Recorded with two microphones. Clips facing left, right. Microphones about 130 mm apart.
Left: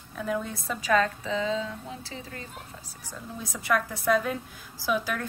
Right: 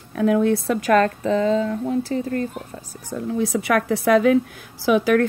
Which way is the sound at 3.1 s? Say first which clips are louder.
Right 16 dB; 80° right.